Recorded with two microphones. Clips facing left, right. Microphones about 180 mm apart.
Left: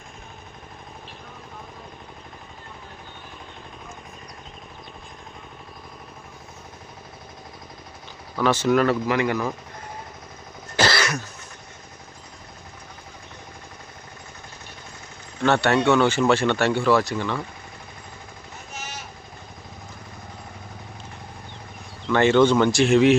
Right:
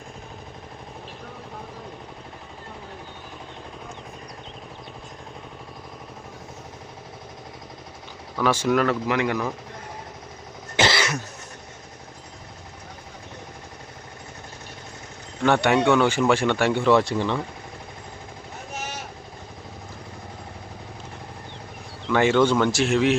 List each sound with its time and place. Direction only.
8.4 s speech: 10° right (ahead or behind)
8.7 s speech: 5° left (ahead or behind)
10.8 s cough: 25° right (ahead or behind)
15.4 s speech: 15° right (ahead or behind)
22.1 s speech: 10° right (ahead or behind)